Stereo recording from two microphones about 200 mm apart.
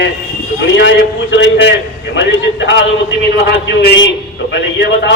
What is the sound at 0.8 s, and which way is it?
A man's voice, 65° left (ahead or behind).